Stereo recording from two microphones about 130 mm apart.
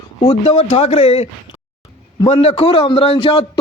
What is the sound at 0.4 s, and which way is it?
A man's voice, 55° left (ahead or behind).